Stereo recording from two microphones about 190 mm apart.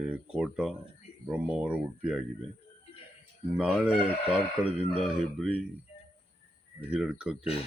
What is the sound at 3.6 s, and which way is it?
Speech, 5° right (ahead or behind).